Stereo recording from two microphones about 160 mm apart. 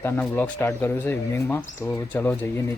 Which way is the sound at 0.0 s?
10° left (ahead or behind).